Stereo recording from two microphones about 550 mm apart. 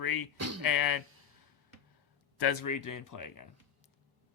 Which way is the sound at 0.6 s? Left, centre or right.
Left.